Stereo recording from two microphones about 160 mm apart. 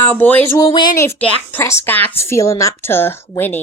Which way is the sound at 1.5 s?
15° left (ahead or behind).